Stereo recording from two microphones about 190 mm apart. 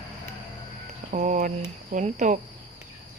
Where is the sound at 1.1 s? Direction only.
40° right (ahead or behind).